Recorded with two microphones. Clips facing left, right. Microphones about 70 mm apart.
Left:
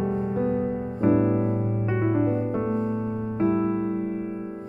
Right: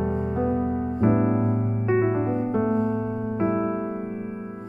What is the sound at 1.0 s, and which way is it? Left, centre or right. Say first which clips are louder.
Music: left 1 dB; right.